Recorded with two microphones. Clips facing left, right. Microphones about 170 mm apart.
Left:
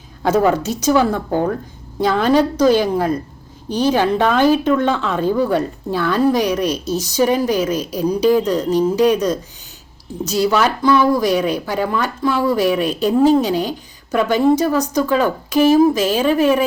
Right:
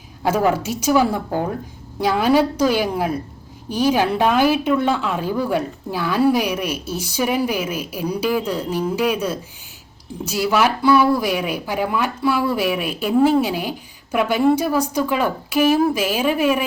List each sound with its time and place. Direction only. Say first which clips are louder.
0.2 s a woman's voice: left 3 dB; 10° right (ahead or behind)
8.0 s speech: left 6 dB; 35° left (ahead or behind)
8.4 s a woman's voice: left 6 dB; 10° right (ahead or behind)